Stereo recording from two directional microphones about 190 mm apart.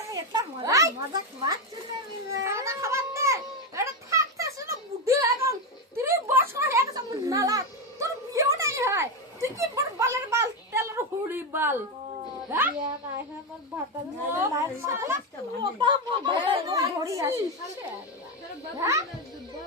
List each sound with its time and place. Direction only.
0.1 s a sound: 20° right (ahead or behind)
12.5 s a woman's voice: 10° right (ahead or behind)
14.3 s a woman's voice: 15° right (ahead or behind)
18.8 s a woman's voice: 15° right (ahead or behind)